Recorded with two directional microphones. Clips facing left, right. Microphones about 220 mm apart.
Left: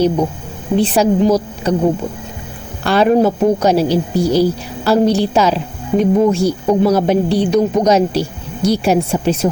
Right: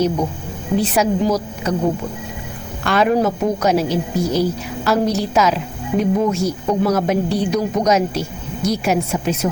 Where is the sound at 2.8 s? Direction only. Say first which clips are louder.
Left 4 dB; 30° left (ahead or behind).